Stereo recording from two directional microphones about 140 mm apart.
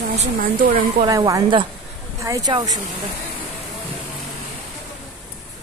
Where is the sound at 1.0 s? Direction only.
25° right (ahead or behind).